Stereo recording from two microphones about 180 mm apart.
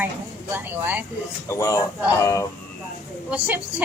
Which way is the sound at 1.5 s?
15° left (ahead or behind).